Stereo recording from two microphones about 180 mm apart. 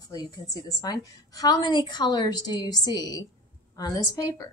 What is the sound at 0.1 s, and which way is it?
A woman's voice, 20° left (ahead or behind).